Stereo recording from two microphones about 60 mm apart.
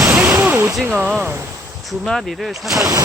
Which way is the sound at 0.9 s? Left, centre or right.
Right.